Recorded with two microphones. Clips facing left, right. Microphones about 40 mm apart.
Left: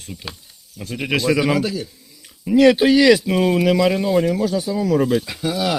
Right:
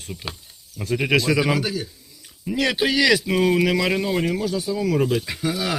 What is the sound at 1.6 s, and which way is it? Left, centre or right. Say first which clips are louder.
Speech: left 3 dB; right.